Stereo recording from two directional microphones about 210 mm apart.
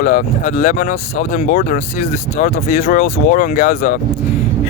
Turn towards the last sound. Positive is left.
turn(degrees=40)  # may be behind; listen again after turning